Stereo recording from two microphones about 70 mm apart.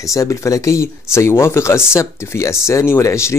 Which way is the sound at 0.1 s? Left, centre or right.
Left.